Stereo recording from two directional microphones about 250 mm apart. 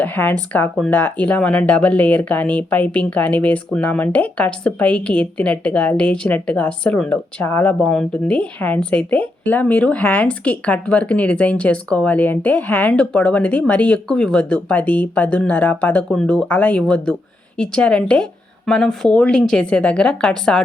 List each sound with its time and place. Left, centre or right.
0.0 s speech: centre